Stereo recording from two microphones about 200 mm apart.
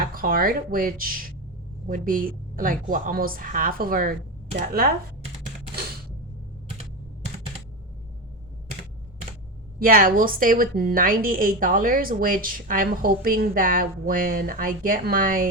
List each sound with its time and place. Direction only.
0.0 s a woman's voice: 45° right (ahead or behind)
9.7 s a woman's voice: 45° right (ahead or behind)